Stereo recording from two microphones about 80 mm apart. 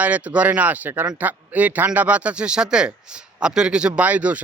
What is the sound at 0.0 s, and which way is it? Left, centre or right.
Speech, centre.